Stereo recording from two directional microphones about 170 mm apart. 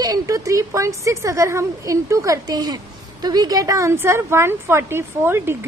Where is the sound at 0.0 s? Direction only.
20° right (ahead or behind).